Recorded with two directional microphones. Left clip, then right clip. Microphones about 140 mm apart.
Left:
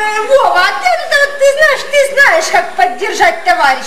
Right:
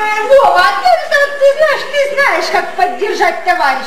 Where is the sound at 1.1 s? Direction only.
25° left (ahead or behind).